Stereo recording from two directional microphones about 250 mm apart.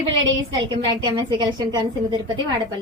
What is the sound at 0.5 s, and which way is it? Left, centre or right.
A woman's voice, centre.